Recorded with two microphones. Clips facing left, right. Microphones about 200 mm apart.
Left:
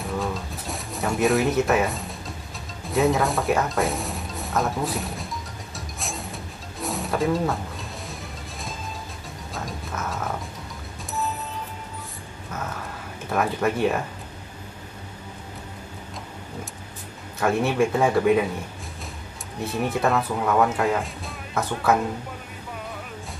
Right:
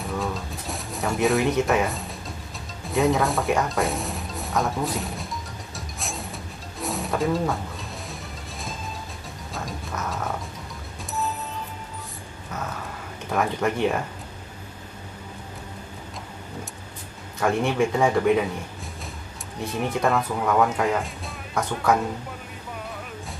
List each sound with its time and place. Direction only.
0.0 s a sound: centre (ahead or behind)
2.9 s speech: centre (ahead or behind)
5.8 s music: centre (ahead or behind)
13.3 s speech: 5° left (ahead or behind)
17.4 s speech: 5° left (ahead or behind)
19.6 s speech: 5° left (ahead or behind)